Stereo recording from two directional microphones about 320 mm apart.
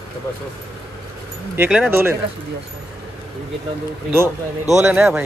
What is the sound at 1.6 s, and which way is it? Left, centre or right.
Speech, centre.